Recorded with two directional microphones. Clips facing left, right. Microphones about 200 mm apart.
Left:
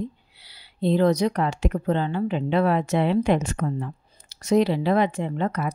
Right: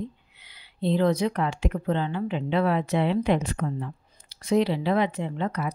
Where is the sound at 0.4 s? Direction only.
35° left (ahead or behind).